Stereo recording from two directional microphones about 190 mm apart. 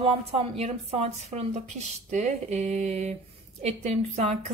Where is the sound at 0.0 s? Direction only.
30° right (ahead or behind).